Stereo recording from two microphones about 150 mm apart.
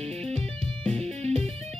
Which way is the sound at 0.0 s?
45° right (ahead or behind).